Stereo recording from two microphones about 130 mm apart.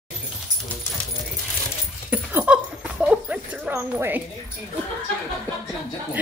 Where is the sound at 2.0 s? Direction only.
10° right (ahead or behind).